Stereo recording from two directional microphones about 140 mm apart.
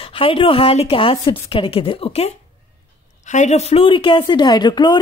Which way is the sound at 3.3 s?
55° left (ahead or behind).